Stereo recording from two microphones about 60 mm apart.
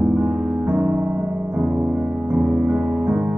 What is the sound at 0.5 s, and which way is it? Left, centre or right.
Music, right.